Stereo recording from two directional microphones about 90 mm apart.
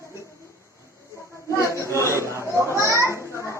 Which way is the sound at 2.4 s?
35° right (ahead or behind).